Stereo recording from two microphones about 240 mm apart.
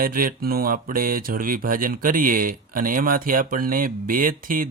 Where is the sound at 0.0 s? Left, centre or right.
Right.